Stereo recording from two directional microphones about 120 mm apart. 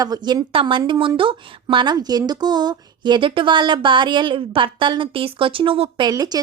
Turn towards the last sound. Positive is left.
turn(degrees=-30)  # may be behind; listen again after turning